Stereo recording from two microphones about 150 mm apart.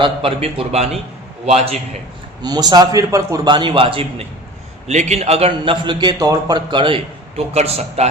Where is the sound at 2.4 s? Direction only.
25° right (ahead or behind).